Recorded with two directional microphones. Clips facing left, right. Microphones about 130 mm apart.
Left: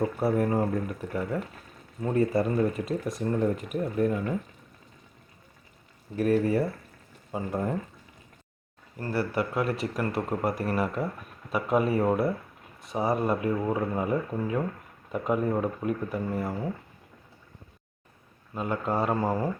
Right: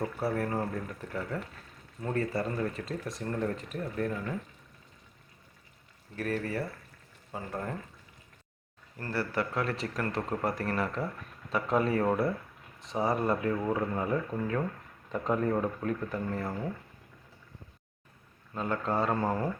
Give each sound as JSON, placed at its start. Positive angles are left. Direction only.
{"t": 0.0, "sound": "speech", "side_deg": 20}
{"t": 6.1, "sound": "speech", "side_deg": 15}
{"t": 9.0, "sound": "speech", "side_deg": 15}
{"t": 18.5, "sound": "speech", "side_deg": 15}